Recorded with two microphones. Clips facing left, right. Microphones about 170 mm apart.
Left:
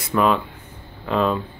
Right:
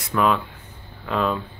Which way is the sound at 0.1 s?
Centre (ahead or behind).